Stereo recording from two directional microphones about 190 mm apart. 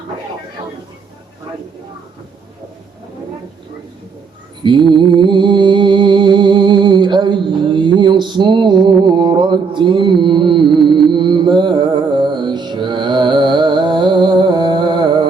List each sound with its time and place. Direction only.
4.6 s mantra: 25° right (ahead or behind)